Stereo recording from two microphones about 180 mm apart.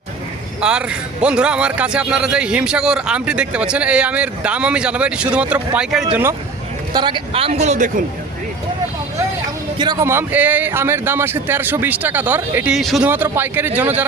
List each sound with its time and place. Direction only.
0.6 s a man's voice: 5° right (ahead or behind)
6.9 s a man's voice: 25° right (ahead or behind); by 8.0 s 40° right (ahead or behind)
9.7 s speech: 20° right (ahead or behind)